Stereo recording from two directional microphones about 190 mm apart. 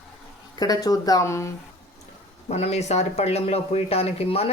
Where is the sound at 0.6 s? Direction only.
20° left (ahead or behind).